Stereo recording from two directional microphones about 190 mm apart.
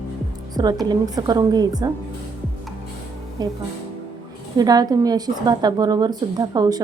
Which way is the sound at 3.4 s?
20° right (ahead or behind).